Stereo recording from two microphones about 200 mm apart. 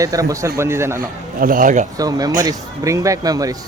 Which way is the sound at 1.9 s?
20° right (ahead or behind).